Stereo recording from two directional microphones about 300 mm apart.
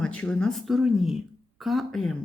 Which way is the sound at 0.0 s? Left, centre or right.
Centre.